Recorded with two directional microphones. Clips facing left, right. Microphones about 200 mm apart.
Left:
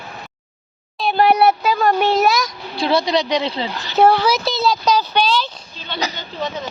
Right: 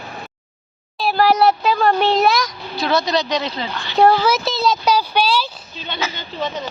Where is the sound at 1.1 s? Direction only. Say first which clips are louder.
Left 1 dB; 20° left (ahead or behind).